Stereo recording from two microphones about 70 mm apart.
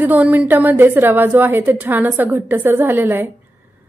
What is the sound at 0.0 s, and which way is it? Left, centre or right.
A woman's voice, right.